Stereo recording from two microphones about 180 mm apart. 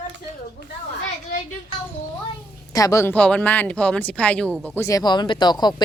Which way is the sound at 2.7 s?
20° left (ahead or behind).